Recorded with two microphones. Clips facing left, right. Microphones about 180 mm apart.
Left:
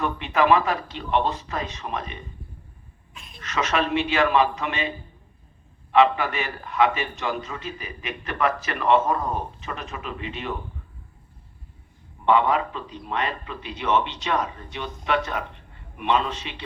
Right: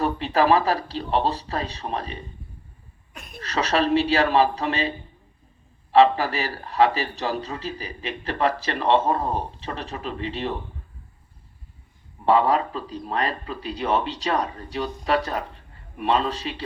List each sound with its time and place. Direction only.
0.0 s a man's voice: 35° right (ahead or behind)
3.1 s a sound: 55° right (ahead or behind)
3.4 s a man's voice: 35° right (ahead or behind)
12.2 s a man's voice: 35° right (ahead or behind)